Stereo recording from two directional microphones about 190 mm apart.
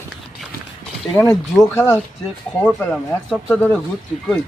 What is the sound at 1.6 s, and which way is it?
Speech, 15° left (ahead or behind).